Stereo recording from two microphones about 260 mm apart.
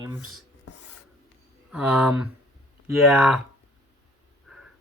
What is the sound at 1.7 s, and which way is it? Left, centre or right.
Speech, centre.